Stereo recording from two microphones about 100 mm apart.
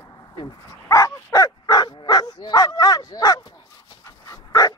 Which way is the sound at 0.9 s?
35° left (ahead or behind).